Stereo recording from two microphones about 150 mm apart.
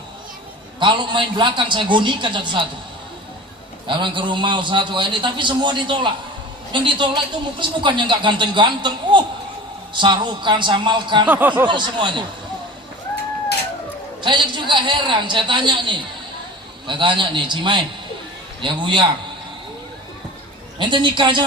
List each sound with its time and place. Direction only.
0.8 s a man's voice: 30° right (ahead or behind)
3.8 s a man's voice: 35° right (ahead or behind)
11.3 s speech: 10° right (ahead or behind)
11.6 s a man's voice: 30° right (ahead or behind)
14.2 s a man's voice: 30° right (ahead or behind)
20.7 s a man's voice: 30° right (ahead or behind)